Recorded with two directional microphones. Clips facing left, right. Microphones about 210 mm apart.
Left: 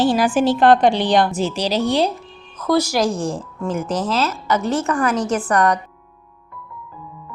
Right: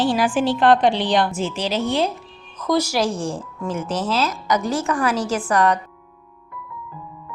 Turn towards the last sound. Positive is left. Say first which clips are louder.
# left 1 dB
turn(degrees=-10)  # may be behind; listen again after turning